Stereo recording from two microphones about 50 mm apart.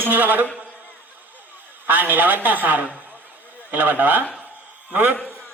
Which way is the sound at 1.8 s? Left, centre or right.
Right.